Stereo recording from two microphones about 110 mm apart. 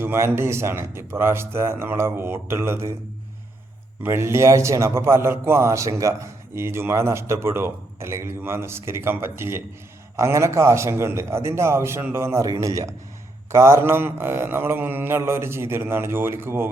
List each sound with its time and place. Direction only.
0.0 s a man's voice: 20° right (ahead or behind)
4.0 s a man's voice: 25° right (ahead or behind)